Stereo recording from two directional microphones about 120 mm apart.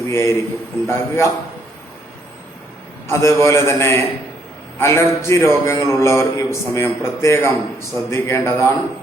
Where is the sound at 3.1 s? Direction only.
25° left (ahead or behind).